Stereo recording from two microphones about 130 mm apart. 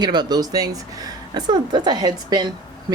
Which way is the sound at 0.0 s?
35° right (ahead or behind).